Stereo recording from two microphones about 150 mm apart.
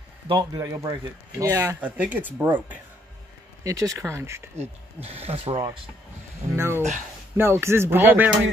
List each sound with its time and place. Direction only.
0.3 s speech: 25° right (ahead or behind)
3.6 s speech: 20° right (ahead or behind)
4.6 s speech: 45° right (ahead or behind)
6.5 s speech: 15° right (ahead or behind)